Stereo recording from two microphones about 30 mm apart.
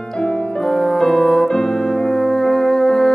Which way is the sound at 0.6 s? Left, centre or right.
Centre.